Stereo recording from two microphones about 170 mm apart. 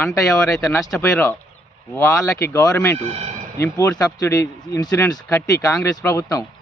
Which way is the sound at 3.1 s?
35° right (ahead or behind).